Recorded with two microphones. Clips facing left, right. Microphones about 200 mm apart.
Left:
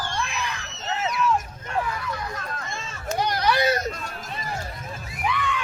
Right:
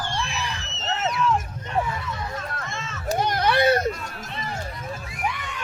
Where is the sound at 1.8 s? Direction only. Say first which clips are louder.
Right 1 dB; 25° right (ahead or behind).